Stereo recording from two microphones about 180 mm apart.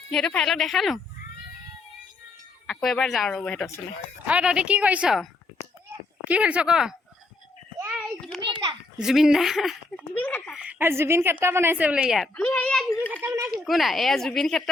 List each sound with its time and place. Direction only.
0.1 s speech: 5° left (ahead or behind)
2.6 s a woman's voice: centre (ahead or behind)
8.4 s a sound: 25° right (ahead or behind)
9.0 s speech: 5° right (ahead or behind)
10.5 s a woman's voice: 5° right (ahead or behind)
13.2 s a woman's voice: 10° right (ahead or behind)
13.6 s speech: centre (ahead or behind)